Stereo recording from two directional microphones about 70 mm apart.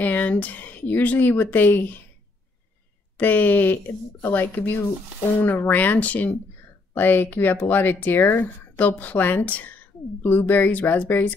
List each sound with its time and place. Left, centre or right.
0.0 s speech: left
3.2 s speech: left